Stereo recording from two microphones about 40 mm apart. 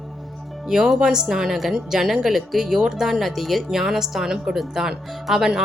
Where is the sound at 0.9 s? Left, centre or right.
Centre.